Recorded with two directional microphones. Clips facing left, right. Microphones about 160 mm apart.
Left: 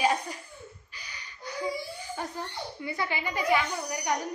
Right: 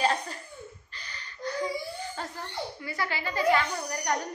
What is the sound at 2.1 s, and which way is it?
A woman's voice, 20° left (ahead or behind).